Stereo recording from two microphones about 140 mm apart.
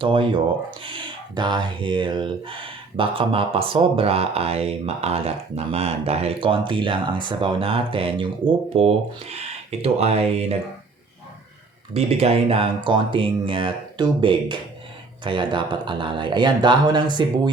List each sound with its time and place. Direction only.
0.0 s speech: 35° right (ahead or behind)
11.9 s speech: 45° right (ahead or behind)